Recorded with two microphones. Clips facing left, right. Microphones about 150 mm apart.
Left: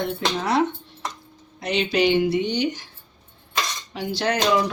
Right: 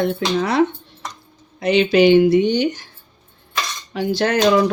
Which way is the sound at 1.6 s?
65° right (ahead or behind).